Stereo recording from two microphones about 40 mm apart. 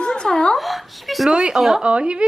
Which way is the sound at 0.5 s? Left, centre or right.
Centre.